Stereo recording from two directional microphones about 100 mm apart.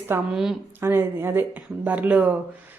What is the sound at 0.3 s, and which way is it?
Speech, 5° right (ahead or behind).